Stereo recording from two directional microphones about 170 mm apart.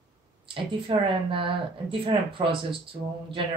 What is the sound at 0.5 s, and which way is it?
Speech, 30° right (ahead or behind).